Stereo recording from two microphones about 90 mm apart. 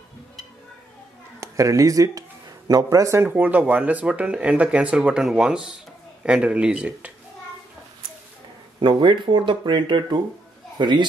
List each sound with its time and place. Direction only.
1.4 s a man's voice: 35° right (ahead or behind)
3.3 s speech: 20° right (ahead or behind)
8.7 s speech: 60° right (ahead or behind)